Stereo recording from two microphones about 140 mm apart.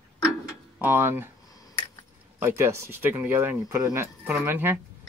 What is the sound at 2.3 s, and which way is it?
Speech, 15° right (ahead or behind).